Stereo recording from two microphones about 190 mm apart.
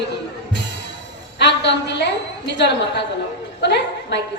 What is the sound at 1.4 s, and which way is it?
A woman's voice, 65° left (ahead or behind).